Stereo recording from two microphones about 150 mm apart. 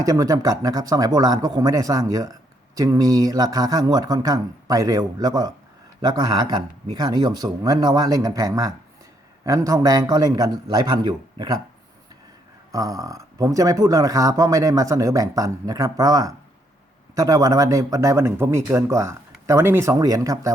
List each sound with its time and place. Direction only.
0.0 s speech: 25° right (ahead or behind)
12.7 s speech: 25° right (ahead or behind)